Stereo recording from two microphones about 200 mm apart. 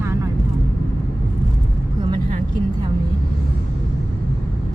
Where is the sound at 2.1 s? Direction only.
35° right (ahead or behind).